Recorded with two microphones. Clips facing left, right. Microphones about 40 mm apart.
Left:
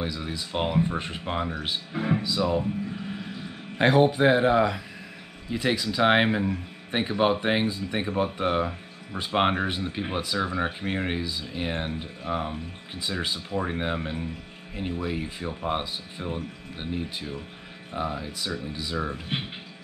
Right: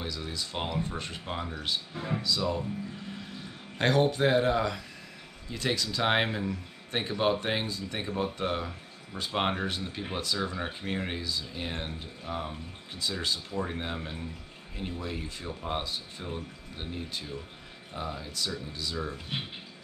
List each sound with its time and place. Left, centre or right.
0.0 s a man's voice: centre
3.7 s a man's voice: centre